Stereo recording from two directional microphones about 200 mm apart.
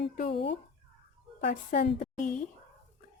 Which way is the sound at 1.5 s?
40° left (ahead or behind).